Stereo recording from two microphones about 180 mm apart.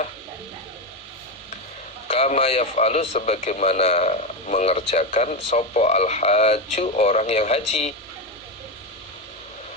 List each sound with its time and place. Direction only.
2.0 s a man's voice: 35° left (ahead or behind)